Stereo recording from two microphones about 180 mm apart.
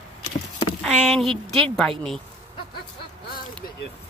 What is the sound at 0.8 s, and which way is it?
Speech, centre (ahead or behind).